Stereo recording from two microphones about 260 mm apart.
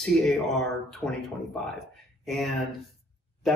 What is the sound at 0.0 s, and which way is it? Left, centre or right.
Speech, centre.